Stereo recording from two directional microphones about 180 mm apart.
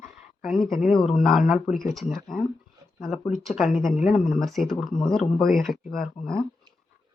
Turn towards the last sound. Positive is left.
turn(degrees=35)  # may be behind; listen again after turning